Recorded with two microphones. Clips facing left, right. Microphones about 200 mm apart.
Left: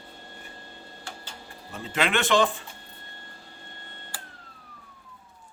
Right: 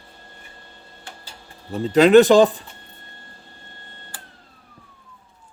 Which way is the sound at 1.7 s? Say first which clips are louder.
Right 15 dB; 40° right (ahead or behind).